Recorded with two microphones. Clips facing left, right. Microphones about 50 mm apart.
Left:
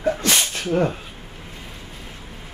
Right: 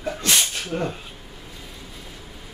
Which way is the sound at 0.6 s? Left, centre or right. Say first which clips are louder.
Left 6 dB; left.